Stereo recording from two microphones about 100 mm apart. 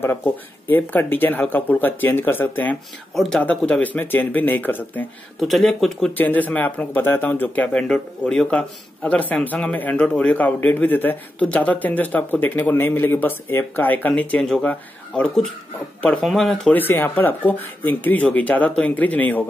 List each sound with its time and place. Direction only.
0.0 s speech: 20° left (ahead or behind)
5.4 s speech: 5° left (ahead or behind)
6.1 s speech: 15° left (ahead or behind)
16.3 s speech: centre (ahead or behind)
16.7 s speech: 20° left (ahead or behind)